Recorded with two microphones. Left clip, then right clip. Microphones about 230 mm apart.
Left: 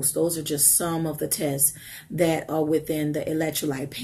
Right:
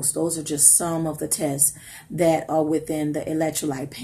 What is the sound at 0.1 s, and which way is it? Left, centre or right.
Speech, centre.